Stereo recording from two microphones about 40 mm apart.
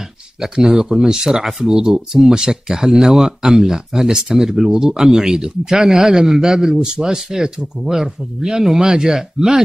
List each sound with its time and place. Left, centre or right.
0.4 s speech: centre
4.6 s speech: centre